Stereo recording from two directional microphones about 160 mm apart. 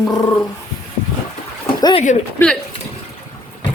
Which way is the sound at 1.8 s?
30° left (ahead or behind).